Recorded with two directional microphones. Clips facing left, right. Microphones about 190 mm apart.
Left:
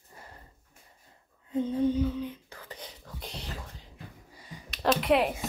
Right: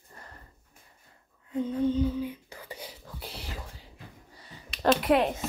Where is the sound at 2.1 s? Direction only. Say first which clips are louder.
Right 2 dB; 5° right (ahead or behind).